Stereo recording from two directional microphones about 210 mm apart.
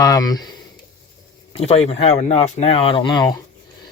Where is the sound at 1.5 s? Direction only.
30° left (ahead or behind).